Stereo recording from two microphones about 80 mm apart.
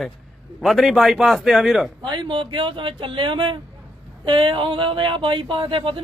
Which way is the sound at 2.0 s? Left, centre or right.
Right.